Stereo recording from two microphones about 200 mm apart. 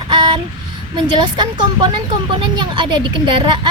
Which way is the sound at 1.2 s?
20° right (ahead or behind).